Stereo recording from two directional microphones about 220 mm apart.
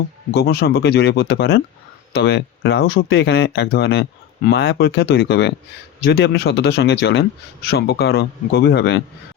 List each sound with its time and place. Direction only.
0.3 s a man's voice: 45° left (ahead or behind)